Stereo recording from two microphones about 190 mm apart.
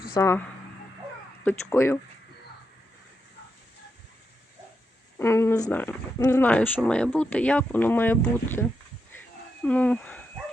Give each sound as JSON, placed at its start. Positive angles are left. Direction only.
{"t": 0.1, "sound": "speech", "side_deg": 15}
{"t": 1.5, "sound": "speech", "side_deg": 15}
{"t": 5.1, "sound": "speech", "side_deg": 15}
{"t": 9.6, "sound": "speech", "side_deg": 5}